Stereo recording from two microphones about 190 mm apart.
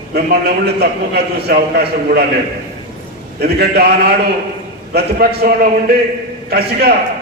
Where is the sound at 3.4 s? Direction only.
55° right (ahead or behind).